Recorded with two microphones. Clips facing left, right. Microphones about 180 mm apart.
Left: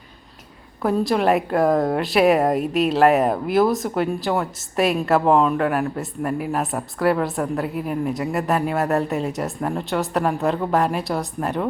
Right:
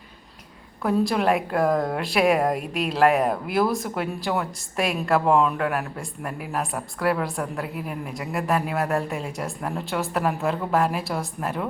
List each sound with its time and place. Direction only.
0.8 s speech: centre (ahead or behind)